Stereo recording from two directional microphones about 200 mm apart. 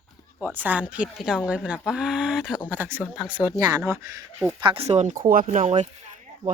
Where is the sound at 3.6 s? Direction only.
15° right (ahead or behind).